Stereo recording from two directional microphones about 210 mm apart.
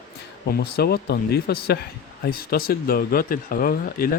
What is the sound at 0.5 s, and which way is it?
Speech, 50° left (ahead or behind).